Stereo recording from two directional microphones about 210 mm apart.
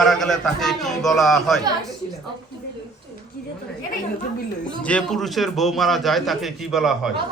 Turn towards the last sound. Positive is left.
turn(degrees=0)  # may be behind; listen again after turning